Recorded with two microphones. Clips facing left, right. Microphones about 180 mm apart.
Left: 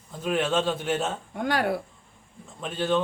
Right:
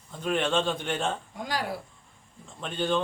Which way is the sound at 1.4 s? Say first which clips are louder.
Left 6 dB; 60° left (ahead or behind).